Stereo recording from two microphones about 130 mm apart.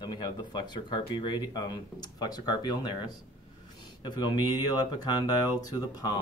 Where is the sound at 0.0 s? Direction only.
35° left (ahead or behind).